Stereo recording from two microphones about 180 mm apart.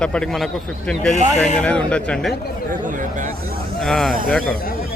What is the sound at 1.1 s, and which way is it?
Speech, 40° left (ahead or behind).